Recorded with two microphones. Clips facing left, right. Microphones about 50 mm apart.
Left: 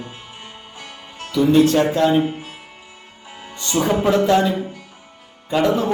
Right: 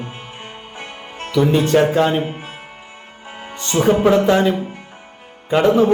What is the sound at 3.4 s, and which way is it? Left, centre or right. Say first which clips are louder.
Speech: right 2 dB; right.